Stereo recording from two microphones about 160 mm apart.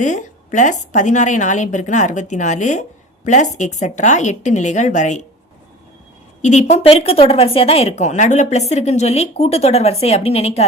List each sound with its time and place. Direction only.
0.0 s a woman's voice: 50° left (ahead or behind)
6.4 s speech: 45° left (ahead or behind)